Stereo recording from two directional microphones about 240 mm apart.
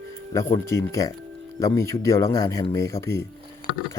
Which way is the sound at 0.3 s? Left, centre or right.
Centre.